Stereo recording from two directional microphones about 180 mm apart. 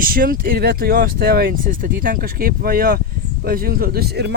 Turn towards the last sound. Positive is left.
turn(degrees=-65)  # may be behind; listen again after turning